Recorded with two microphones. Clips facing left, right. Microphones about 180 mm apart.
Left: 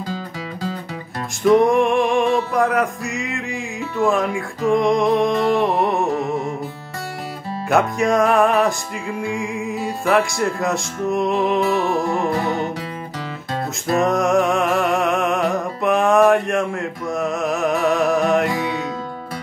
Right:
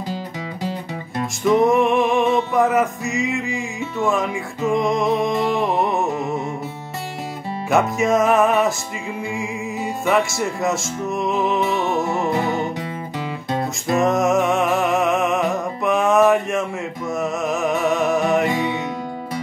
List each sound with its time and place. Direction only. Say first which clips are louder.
1.5 s a sound: left 1 dB; centre (ahead or behind)
2.5 s speech: right 1 dB; centre (ahead or behind)
7.7 s speech: even; centre (ahead or behind)
11.8 s music: left 1 dB; 20° right (ahead or behind)
13.9 s music: even; centre (ahead or behind)
17.1 s speech: left 1 dB; centre (ahead or behind)